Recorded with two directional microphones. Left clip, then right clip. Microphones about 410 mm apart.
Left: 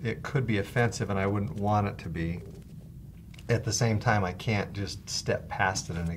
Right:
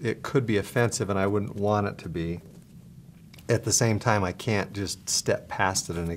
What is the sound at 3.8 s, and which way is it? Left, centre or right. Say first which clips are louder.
Speech: right 3 dB; right.